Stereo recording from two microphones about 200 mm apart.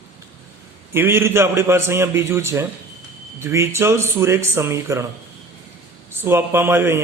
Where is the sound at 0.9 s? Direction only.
10° right (ahead or behind).